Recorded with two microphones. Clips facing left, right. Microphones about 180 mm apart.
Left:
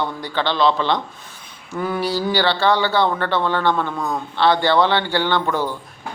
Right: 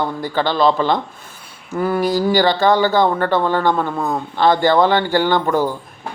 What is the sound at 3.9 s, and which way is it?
Speech, 25° right (ahead or behind).